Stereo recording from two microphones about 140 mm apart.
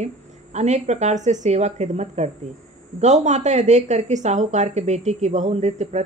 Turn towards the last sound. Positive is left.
turn(degrees=-55)  # may be behind; listen again after turning